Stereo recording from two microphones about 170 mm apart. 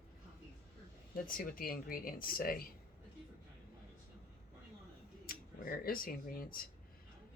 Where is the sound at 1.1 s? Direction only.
55° left (ahead or behind).